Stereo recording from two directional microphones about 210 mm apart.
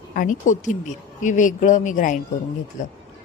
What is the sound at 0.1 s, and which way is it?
Speech, 40° left (ahead or behind).